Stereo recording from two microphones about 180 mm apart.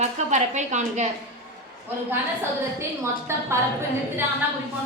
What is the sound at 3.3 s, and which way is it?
Speech, 15° right (ahead or behind).